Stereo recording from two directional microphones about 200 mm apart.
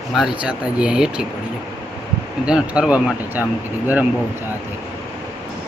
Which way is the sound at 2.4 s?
5° right (ahead or behind).